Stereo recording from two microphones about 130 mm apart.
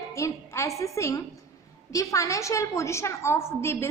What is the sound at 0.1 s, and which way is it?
A woman's voice, 20° left (ahead or behind).